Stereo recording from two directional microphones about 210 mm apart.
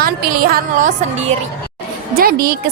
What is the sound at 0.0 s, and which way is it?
A woman's voice, 45° right (ahead or behind).